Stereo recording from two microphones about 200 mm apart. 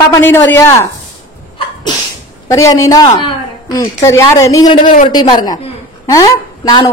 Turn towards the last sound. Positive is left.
turn(degrees=20)  # may be behind; listen again after turning